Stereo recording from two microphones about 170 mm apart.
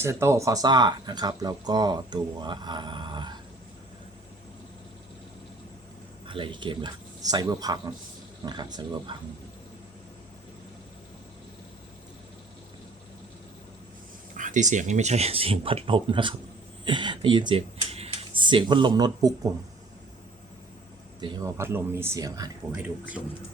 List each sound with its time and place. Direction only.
0.0 s speech: 15° right (ahead or behind)
6.2 s speech: 30° right (ahead or behind)
14.3 s speech: 45° right (ahead or behind); by 19.5 s 20° right (ahead or behind)
21.2 s speech: 25° right (ahead or behind)
21.6 s speech: 15° right (ahead or behind)
22.7 s speech: 10° right (ahead or behind)